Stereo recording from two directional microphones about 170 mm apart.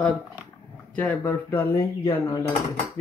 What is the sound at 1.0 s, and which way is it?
Speech, 10° left (ahead or behind).